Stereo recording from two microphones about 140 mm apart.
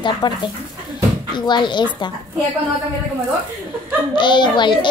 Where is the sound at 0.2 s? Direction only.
30° left (ahead or behind).